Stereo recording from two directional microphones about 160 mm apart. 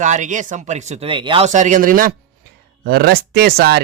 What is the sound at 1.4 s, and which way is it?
Speech, 50° right (ahead or behind).